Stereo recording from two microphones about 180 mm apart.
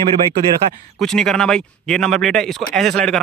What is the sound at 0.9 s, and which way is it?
Speech, centre (ahead or behind).